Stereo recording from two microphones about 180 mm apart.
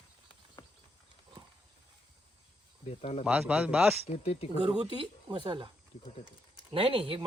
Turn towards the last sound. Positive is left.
turn(degrees=-30)  # may be behind; listen again after turning